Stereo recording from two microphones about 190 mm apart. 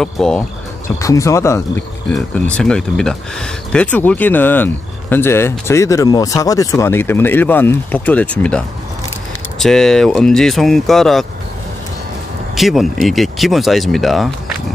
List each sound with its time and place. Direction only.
0.0 s speech: 5° left (ahead or behind)
0.8 s speech: 15° left (ahead or behind)
12.5 s speech: centre (ahead or behind)